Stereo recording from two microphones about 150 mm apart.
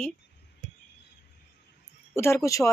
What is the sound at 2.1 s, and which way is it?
Speech, 15° left (ahead or behind).